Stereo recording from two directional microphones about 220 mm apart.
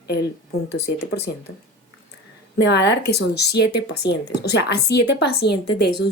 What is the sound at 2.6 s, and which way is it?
Speech, 50° left (ahead or behind).